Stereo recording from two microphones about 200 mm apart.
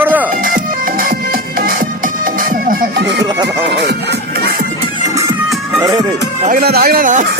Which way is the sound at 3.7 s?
55° right (ahead or behind).